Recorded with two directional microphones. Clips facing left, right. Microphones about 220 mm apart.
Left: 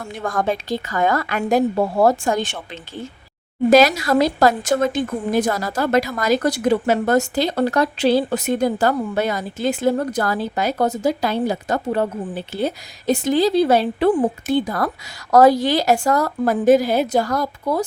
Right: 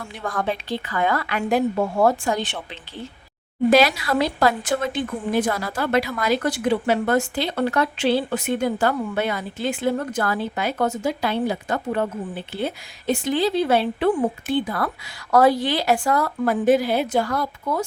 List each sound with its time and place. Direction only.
0.0 s a woman's voice: 45° left (ahead or behind)